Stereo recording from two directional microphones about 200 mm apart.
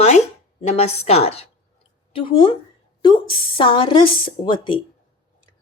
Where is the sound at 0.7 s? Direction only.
30° left (ahead or behind).